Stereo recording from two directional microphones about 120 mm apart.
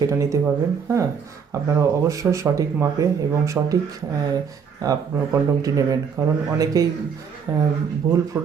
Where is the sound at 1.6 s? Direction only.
25° right (ahead or behind).